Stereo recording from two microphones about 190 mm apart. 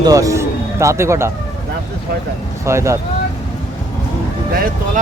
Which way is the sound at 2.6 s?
15° right (ahead or behind).